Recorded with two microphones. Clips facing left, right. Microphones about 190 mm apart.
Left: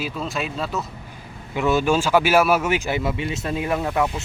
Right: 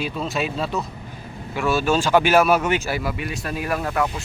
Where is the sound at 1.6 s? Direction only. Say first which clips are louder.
Left 1 dB; 20° left (ahead or behind).